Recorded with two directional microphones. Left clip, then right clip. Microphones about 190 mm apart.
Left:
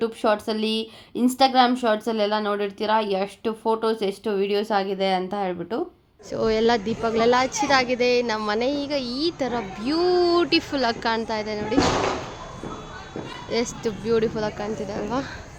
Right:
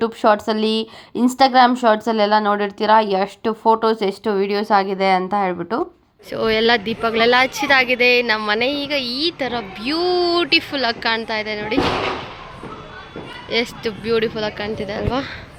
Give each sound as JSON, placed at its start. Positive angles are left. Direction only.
{"t": 0.0, "sound": "speech", "side_deg": -25}
{"t": 6.3, "sound": "speech", "side_deg": 5}
{"t": 13.5, "sound": "speech", "side_deg": 10}